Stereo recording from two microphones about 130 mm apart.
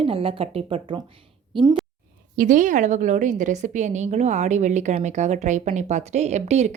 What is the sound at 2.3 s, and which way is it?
A woman's voice, 90° right.